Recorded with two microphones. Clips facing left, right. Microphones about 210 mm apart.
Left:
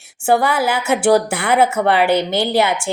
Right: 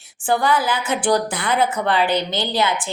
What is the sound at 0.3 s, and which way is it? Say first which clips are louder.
A woman's voice: left 3 dB; 65° left (ahead or behind).